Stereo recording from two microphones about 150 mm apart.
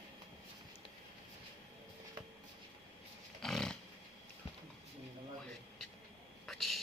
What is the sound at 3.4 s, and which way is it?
Roaring cats, 5° left (ahead or behind).